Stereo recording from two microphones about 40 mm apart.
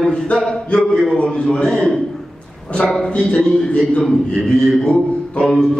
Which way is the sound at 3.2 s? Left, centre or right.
Left.